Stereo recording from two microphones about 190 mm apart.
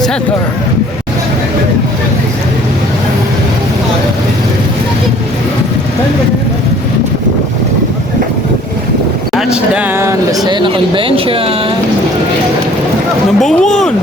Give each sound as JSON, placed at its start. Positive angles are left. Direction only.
{"t": 9.3, "sound": "a sound", "side_deg": -5}
{"t": 10.4, "sound": "speech", "side_deg": -25}
{"t": 13.4, "sound": "speech", "side_deg": 5}